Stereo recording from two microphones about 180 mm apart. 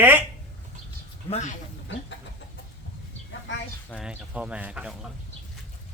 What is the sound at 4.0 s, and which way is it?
Speech, 5° right (ahead or behind).